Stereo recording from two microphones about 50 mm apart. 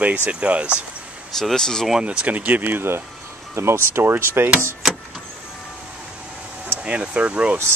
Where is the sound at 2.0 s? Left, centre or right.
Right.